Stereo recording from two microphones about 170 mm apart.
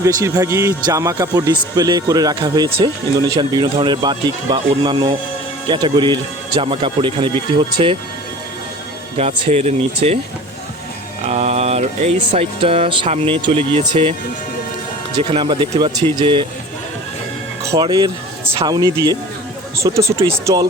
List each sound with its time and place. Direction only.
0.0 s speech: 20° right (ahead or behind)
9.1 s speech: 35° right (ahead or behind)
11.3 s speech: 40° right (ahead or behind)
17.6 s speech: 15° right (ahead or behind)